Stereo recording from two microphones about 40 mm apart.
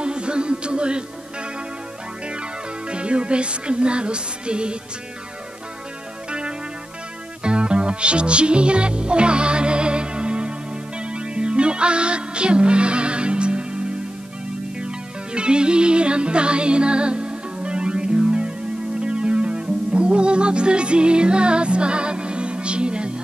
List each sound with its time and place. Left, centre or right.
0.0 s music: right
2.9 s music: right
7.4 s music: right